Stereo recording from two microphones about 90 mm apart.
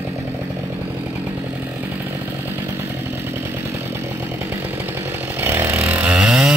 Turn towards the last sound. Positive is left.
turn(degrees=-10)  # may be behind; listen again after turning